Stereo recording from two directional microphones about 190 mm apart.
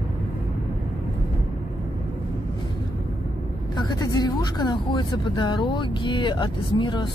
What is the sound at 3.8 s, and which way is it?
Speech, 20° left (ahead or behind).